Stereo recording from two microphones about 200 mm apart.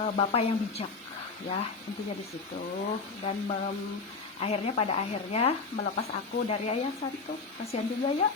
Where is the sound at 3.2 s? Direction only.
40° left (ahead or behind).